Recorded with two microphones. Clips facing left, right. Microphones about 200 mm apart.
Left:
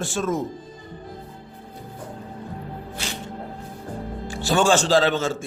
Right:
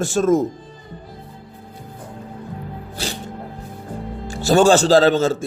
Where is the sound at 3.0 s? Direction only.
35° right (ahead or behind).